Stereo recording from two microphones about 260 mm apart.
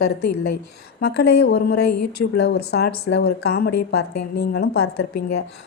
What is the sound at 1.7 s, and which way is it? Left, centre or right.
Speech, left.